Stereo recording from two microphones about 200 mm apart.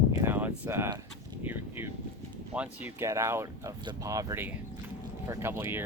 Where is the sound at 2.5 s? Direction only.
10° right (ahead or behind).